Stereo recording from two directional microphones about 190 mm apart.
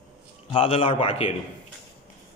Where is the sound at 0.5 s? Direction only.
30° left (ahead or behind).